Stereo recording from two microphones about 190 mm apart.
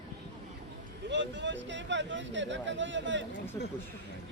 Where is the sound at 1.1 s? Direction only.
70° right (ahead or behind).